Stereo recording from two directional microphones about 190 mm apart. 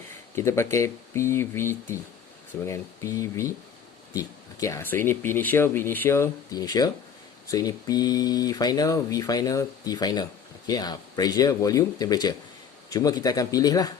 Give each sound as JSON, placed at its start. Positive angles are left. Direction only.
{"t": 0.3, "sound": "speech", "side_deg": 15}